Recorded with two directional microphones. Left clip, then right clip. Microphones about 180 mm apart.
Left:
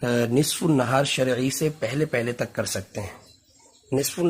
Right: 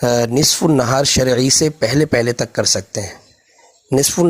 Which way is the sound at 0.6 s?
40° right (ahead or behind).